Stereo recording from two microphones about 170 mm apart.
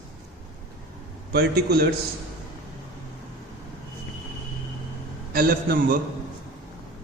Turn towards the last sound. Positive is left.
turn(degrees=-55)  # may be behind; listen again after turning